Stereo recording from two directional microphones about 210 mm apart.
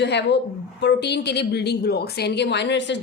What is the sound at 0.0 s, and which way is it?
A woman's voice, 55° left (ahead or behind).